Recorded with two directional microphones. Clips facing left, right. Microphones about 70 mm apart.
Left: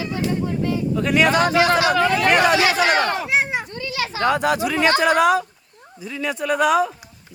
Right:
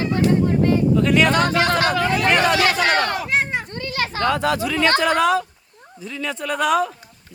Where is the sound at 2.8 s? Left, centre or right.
Left.